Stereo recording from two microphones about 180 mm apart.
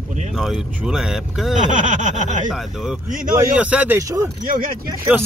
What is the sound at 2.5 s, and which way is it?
Speech, 5° right (ahead or behind).